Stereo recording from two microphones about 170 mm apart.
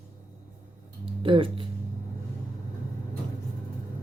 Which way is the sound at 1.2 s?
30° right (ahead or behind).